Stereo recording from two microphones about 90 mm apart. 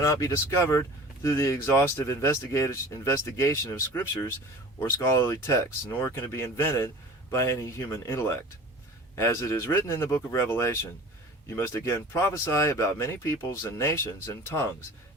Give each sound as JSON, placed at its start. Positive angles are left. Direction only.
{"t": 0.0, "sound": "speech", "side_deg": 35}